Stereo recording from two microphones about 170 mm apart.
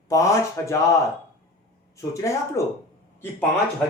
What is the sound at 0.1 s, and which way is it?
Speech, 20° left (ahead or behind).